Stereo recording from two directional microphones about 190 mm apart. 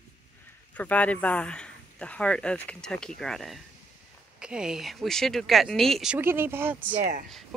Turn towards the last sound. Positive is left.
turn(degrees=-40)  # may be behind; listen again after turning